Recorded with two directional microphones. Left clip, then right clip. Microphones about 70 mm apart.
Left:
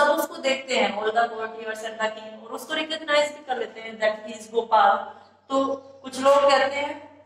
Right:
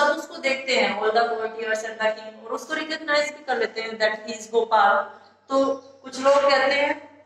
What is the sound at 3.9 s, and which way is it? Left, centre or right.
Speech, right.